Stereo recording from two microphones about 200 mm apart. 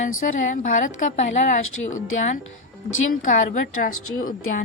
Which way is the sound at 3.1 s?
40° left (ahead or behind).